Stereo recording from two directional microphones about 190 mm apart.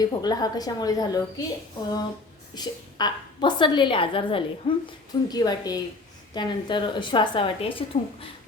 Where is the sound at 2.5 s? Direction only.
20° left (ahead or behind).